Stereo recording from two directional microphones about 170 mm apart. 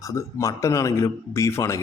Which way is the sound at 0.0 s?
20° left (ahead or behind).